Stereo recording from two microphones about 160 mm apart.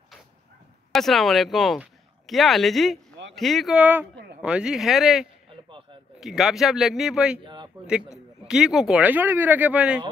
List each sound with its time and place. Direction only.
0.9 s a man's voice: centre (ahead or behind)
7.4 s a sound: 30° right (ahead or behind)
8.5 s speech: 5° right (ahead or behind)